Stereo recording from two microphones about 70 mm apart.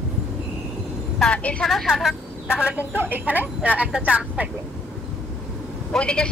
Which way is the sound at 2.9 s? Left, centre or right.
Right.